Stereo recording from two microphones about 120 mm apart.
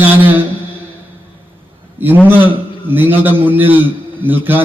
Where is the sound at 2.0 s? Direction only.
15° right (ahead or behind).